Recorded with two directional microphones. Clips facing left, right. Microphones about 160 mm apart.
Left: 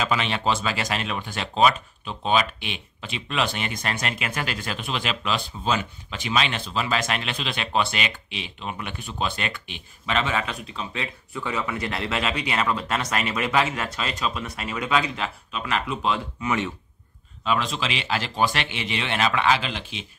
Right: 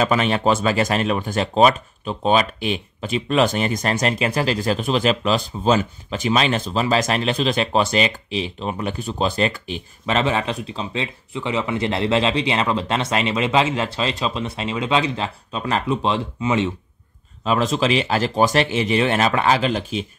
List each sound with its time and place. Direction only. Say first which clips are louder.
0.0 s speech: right 6 dB; 45° right (ahead or behind); by 16.7 s 25° right (ahead or behind)
17.5 s speech: right 7 dB; 40° right (ahead or behind)